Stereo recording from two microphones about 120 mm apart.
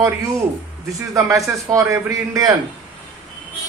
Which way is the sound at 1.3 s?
25° right (ahead or behind).